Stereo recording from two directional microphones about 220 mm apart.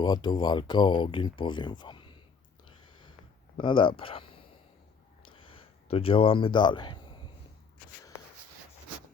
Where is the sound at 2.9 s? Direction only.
20° left (ahead or behind).